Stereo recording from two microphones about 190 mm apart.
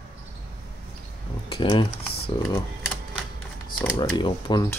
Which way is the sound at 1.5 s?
25° left (ahead or behind).